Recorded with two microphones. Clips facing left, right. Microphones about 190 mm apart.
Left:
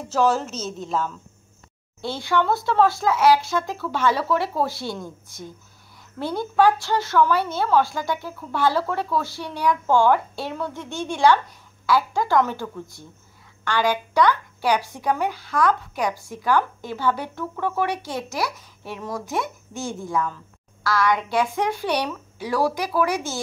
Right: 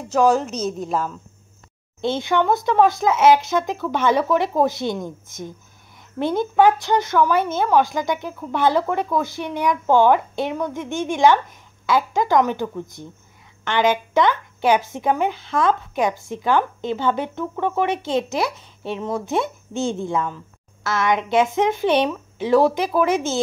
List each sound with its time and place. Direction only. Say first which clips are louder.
0.1 s speech: right 4 dB; 10° right (ahead or behind)
0.4 s a woman's voice: right 6 dB; 5° left (ahead or behind)
2.0 s a woman's voice: right 3 dB; 20° right (ahead or behind)